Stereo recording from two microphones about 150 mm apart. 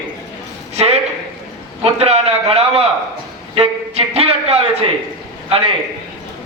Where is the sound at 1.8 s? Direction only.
45° right (ahead or behind).